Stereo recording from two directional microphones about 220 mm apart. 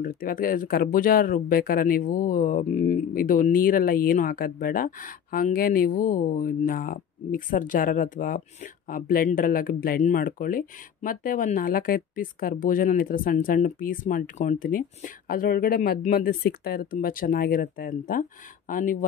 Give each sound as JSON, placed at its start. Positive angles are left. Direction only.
{"t": 0.0, "sound": "speech", "side_deg": 40}